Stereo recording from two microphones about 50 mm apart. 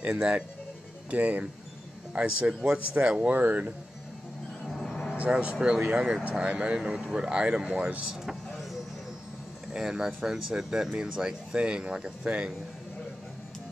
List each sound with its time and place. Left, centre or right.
0.1 s speech: centre
1.1 s speech: right
2.1 s speech: right
3.2 s speech: right
4.6 s vehicle: centre
5.1 s speech: right
9.7 s speech: centre